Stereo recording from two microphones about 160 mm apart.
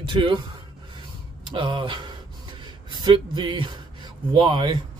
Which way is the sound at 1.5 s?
30° right (ahead or behind).